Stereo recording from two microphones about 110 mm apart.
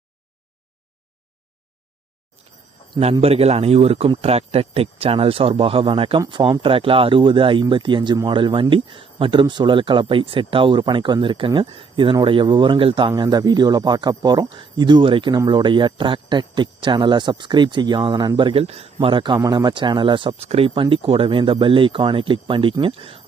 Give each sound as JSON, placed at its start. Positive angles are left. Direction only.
{"t": 3.0, "sound": "speech", "side_deg": -65}
{"t": 13.1, "sound": "speech", "side_deg": -40}
{"t": 18.6, "sound": "speech", "side_deg": -70}
{"t": 19.0, "sound": "speech", "side_deg": -45}
{"t": 20.4, "sound": "speech", "side_deg": -65}